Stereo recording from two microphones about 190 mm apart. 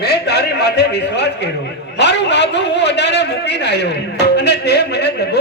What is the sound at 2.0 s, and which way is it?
A man's voice, 65° left (ahead or behind).